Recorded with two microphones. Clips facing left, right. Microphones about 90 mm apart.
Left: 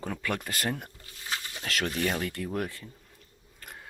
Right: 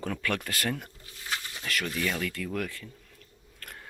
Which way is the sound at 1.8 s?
40° left (ahead or behind).